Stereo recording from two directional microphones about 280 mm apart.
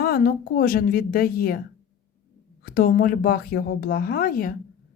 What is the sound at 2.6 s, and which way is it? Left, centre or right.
A woman's voice, left.